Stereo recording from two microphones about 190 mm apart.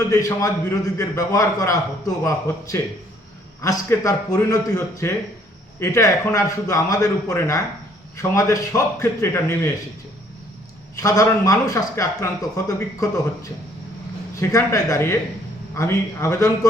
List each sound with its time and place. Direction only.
0.1 s a man's voice: 15° left (ahead or behind)
10.9 s a man's voice: 15° left (ahead or behind)